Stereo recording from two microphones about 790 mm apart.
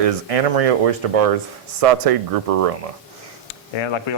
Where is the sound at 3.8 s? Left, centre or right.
Left.